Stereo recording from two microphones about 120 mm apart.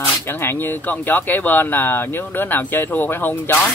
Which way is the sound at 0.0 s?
20° left (ahead or behind).